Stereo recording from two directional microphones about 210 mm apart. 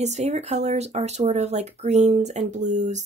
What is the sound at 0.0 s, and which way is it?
Speech, 30° right (ahead or behind).